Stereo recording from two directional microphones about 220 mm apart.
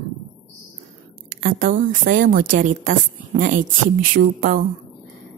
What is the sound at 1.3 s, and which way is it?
A woman's voice, 40° right (ahead or behind).